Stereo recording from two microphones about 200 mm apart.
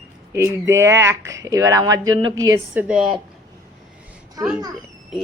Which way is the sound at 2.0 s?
90° right.